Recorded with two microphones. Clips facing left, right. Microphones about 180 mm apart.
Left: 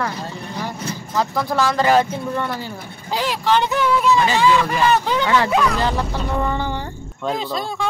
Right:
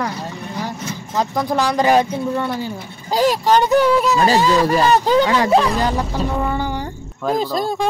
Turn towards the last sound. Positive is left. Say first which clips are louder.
# right 5 dB
turn(degrees=-40)  # may be behind; listen again after turning